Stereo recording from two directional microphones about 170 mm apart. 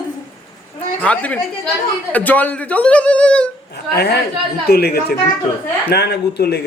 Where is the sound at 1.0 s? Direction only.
10° left (ahead or behind).